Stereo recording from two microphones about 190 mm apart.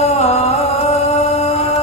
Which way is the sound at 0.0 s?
35° left (ahead or behind).